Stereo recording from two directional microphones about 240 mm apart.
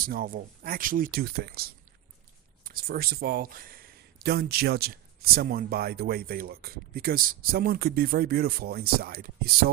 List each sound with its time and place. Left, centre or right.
0.0 s speech: right